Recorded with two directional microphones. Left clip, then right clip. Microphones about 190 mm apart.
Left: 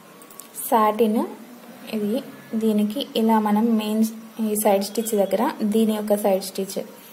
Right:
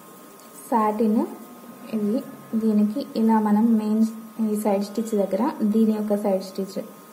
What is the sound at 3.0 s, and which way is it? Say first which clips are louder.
Speech: left 4 dB; 30° left (ahead or behind).